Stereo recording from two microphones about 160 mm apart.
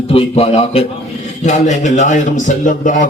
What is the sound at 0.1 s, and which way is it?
A man's voice, 35° left (ahead or behind).